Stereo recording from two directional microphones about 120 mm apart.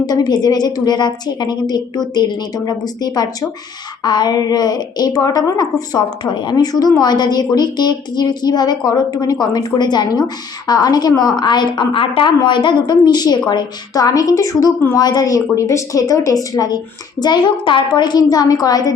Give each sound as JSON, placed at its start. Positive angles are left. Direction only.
{"t": 0.0, "sound": "a woman's voice", "side_deg": 35}